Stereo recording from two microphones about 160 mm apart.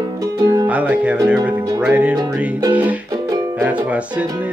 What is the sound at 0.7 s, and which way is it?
Music, 10° right (ahead or behind).